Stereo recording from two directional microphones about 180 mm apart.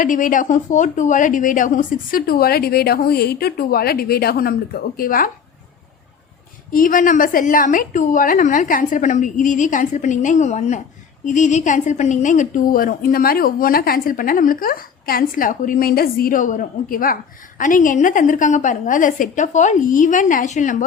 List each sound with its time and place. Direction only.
0.0 s a woman's voice: 45° left (ahead or behind)
6.7 s a woman's voice: 50° left (ahead or behind)